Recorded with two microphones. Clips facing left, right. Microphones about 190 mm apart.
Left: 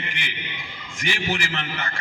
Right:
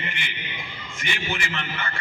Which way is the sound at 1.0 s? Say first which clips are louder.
Left 4 dB; 80° left.